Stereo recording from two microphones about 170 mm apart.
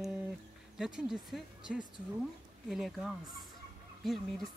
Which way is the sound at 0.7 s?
5° right (ahead or behind).